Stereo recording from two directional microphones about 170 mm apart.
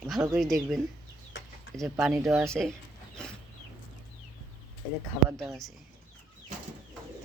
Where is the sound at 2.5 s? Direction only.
5° left (ahead or behind).